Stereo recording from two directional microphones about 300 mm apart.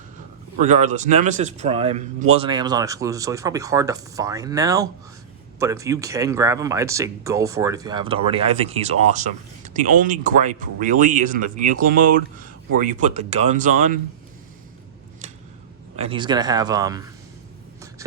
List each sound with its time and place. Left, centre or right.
0.6 s a man's voice: right
16.0 s a man's voice: centre